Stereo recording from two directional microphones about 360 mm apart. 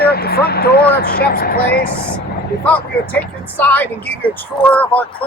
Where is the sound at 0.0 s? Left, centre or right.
Left.